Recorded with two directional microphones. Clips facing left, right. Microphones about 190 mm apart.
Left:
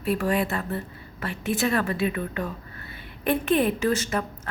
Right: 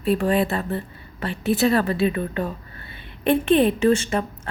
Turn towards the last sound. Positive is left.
turn(degrees=-25)  # may be behind; listen again after turning